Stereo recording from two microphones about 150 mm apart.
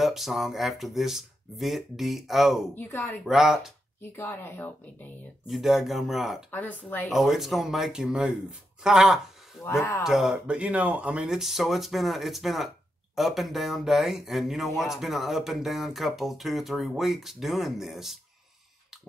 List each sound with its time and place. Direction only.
0.0 s speech: centre (ahead or behind)
2.7 s speech: 15° left (ahead or behind)
3.3 s speech: 5° right (ahead or behind)
4.0 s speech: 15° left (ahead or behind)
5.5 s speech: centre (ahead or behind)
6.5 s speech: 15° left (ahead or behind)
7.1 s speech: centre (ahead or behind)
9.7 s speech: 15° left (ahead or behind)
10.0 s speech: 5° right (ahead or behind)